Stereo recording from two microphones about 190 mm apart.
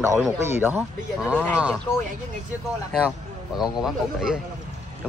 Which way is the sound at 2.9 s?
Centre (ahead or behind).